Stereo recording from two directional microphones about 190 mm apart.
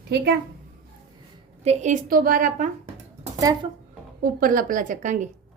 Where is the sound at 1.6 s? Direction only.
40° right (ahead or behind).